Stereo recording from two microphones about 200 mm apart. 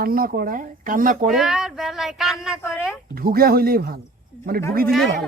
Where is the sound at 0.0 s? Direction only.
45° right (ahead or behind).